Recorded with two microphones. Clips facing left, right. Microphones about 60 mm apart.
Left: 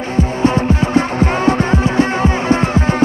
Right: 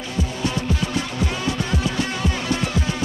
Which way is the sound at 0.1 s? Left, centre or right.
Left.